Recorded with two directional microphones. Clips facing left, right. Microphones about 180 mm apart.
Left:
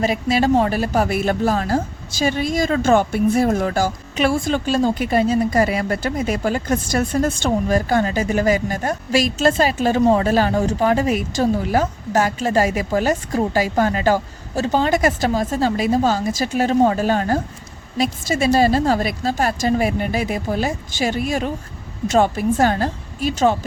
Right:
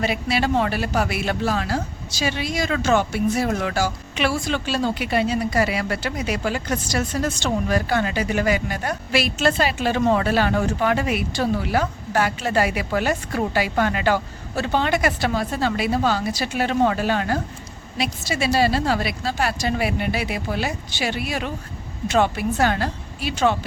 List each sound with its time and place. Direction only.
0.0 s a woman's voice: 40° left (ahead or behind)